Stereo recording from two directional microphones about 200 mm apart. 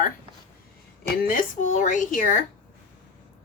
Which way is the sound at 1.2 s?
45° left (ahead or behind).